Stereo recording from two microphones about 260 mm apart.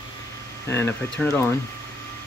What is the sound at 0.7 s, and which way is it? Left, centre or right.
Speech, centre.